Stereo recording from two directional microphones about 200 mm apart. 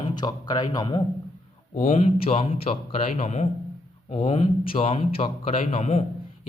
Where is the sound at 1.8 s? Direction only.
35° left (ahead or behind).